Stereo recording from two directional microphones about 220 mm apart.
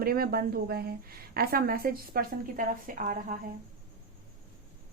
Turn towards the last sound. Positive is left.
turn(degrees=-40)  # may be behind; listen again after turning